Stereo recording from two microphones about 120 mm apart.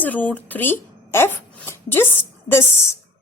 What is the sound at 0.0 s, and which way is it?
A woman's voice, 15° left (ahead or behind).